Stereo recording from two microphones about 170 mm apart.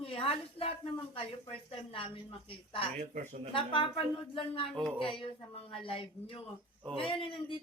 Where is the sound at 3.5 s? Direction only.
30° left (ahead or behind).